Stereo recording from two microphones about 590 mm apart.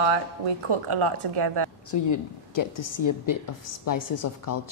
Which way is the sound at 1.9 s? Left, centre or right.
Left.